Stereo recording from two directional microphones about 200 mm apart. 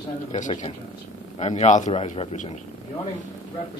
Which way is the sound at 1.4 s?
35° left (ahead or behind).